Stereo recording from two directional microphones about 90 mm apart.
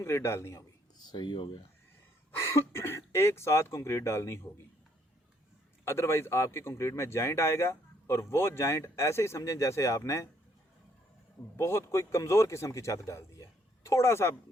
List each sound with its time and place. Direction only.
0.0 s a man's voice: 30° left (ahead or behind)
0.9 s speech: 55° left (ahead or behind)
2.3 s speech: 25° left (ahead or behind)
5.8 s speech: 30° left (ahead or behind)
11.5 s speech: 30° left (ahead or behind)